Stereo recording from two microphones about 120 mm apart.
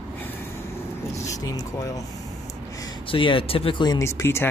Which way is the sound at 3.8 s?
30° left (ahead or behind).